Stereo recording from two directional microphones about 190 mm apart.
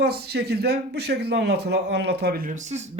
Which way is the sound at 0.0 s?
60° right (ahead or behind).